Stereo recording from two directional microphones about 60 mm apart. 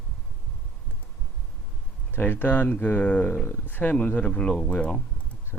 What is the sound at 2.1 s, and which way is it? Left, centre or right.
Speech, left.